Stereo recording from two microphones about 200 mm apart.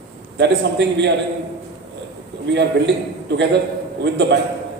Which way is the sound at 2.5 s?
60° right (ahead or behind).